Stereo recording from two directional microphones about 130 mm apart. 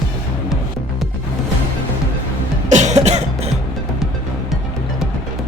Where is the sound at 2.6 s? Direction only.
65° right (ahead or behind).